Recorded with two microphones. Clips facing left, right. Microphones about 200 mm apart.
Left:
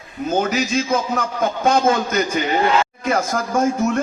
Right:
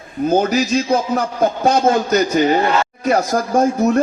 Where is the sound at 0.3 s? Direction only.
35° right (ahead or behind).